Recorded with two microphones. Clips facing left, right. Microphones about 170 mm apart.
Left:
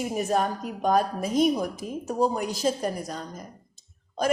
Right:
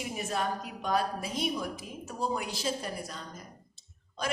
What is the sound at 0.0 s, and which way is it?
A woman's voice, 45° left (ahead or behind).